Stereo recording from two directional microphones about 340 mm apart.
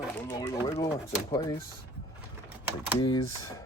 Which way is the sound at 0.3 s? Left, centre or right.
Centre.